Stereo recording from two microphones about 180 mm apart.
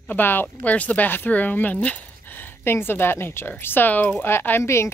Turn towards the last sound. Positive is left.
turn(degrees=15)  # may be behind; listen again after turning